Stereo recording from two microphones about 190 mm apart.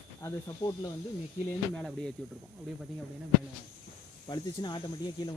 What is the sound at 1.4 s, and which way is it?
Speech, 5° left (ahead or behind).